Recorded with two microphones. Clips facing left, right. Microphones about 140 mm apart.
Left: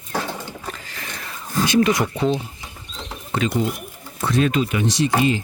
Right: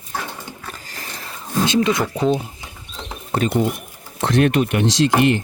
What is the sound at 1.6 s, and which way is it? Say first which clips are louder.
Speech: left 1 dB; 20° right (ahead or behind).